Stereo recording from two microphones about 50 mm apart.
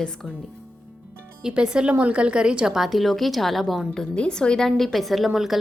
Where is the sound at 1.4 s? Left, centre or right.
Centre.